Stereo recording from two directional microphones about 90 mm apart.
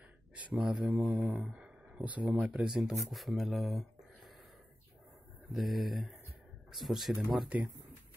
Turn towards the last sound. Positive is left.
turn(degrees=-15)  # may be behind; listen again after turning